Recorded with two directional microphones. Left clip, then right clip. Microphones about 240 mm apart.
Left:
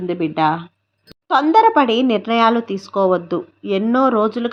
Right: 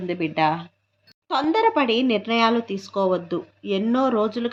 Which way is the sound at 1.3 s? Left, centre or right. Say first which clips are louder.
Left 8 dB; left.